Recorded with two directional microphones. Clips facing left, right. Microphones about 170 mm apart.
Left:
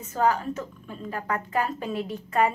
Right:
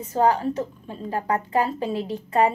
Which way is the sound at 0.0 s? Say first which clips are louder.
Right 4 dB; 30° right (ahead or behind).